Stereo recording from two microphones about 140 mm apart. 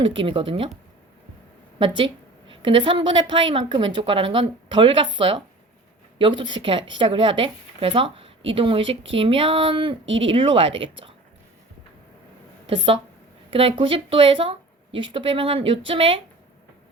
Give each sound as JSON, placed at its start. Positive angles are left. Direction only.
{"t": 0.0, "sound": "speech", "side_deg": -35}
{"t": 1.8, "sound": "speech", "side_deg": -35}
{"t": 12.6, "sound": "speech", "side_deg": -40}